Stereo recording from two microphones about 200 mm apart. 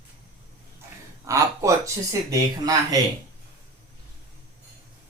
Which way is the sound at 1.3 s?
15° right (ahead or behind).